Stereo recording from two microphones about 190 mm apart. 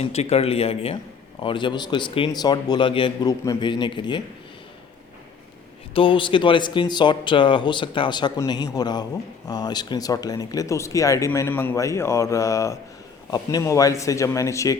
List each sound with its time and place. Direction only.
0.0 s speech: 35° left (ahead or behind)
5.9 s speech: 25° left (ahead or behind)